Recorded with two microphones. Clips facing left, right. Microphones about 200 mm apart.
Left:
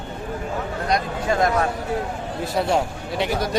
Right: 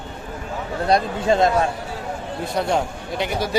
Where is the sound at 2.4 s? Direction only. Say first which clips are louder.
Left 1 dB; centre (ahead or behind).